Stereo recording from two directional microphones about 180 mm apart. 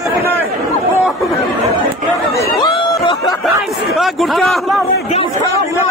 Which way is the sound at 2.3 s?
15° left (ahead or behind).